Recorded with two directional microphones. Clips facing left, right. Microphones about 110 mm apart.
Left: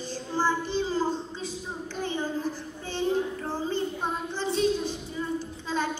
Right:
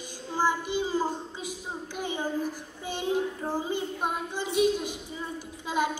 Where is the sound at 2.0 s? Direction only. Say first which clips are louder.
Left 2 dB; 15° right (ahead or behind).